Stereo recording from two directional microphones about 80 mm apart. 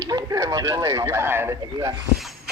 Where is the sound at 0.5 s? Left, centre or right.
Right.